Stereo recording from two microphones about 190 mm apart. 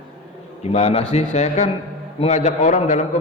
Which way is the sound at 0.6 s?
35° left (ahead or behind).